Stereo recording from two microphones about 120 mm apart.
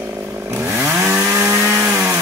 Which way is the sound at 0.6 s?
20° right (ahead or behind).